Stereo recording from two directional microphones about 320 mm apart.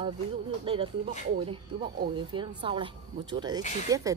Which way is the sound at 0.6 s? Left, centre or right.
Centre.